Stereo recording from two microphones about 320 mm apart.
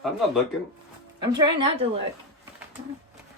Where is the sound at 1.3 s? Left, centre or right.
Centre.